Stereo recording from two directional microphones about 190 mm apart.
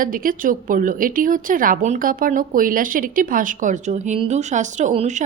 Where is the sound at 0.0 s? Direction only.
45° right (ahead or behind).